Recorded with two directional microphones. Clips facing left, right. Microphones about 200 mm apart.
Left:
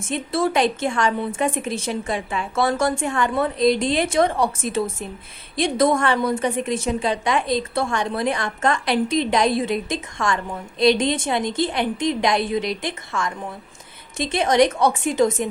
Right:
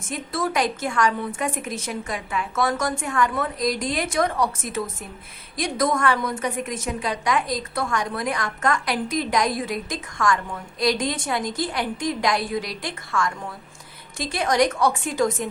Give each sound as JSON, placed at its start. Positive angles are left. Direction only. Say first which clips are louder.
{"t": 0.1, "sound": "a woman's voice", "louder": "left 5 dB", "side_deg": 25}